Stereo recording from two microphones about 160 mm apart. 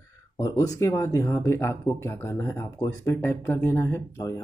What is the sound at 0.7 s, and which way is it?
Speech, 20° left (ahead or behind).